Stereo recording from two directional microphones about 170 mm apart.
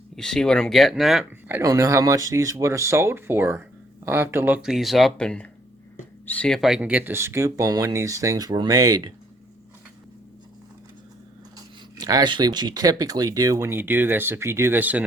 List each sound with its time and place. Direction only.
0.2 s speech: 5° left (ahead or behind)
1.2 s speech: 10° right (ahead or behind)
11.5 s speech: 20° right (ahead or behind)